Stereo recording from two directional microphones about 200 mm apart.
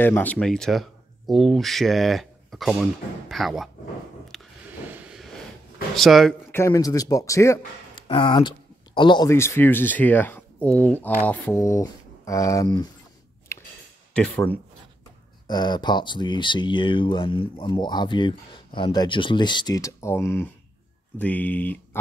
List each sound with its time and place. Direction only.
0.0 s speech: 10° left (ahead or behind)
4.3 s a sound: centre (ahead or behind)
4.8 s vehicle: 5° right (ahead or behind)
5.9 s speech: centre (ahead or behind)
6.5 s speech: 15° left (ahead or behind)
13.5 s clicking: 15° left (ahead or behind)
14.1 s speech: 5° left (ahead or behind)
15.4 s speech: 20° left (ahead or behind)